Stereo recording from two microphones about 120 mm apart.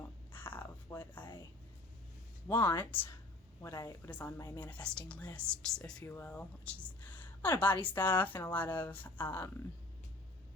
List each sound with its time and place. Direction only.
0.3 s a sound: 15° left (ahead or behind)
2.5 s speech: 15° left (ahead or behind)
3.6 s speech: 25° left (ahead or behind)
4.1 s speech: 15° left (ahead or behind)
4.4 s speech: 25° left (ahead or behind)
4.6 s speech: 10° left (ahead or behind)
6.1 s speech: 15° left (ahead or behind)